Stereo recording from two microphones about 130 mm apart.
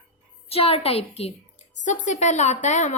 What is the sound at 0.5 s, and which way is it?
Speech, 50° left (ahead or behind).